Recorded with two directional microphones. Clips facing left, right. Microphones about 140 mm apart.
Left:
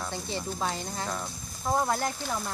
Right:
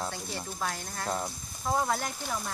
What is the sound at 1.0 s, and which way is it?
Speech, 20° right (ahead or behind).